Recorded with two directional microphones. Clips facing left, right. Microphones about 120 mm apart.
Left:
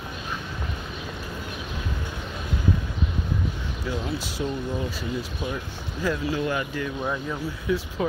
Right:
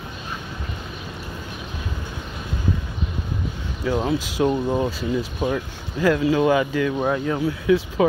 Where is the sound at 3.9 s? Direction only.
55° right (ahead or behind).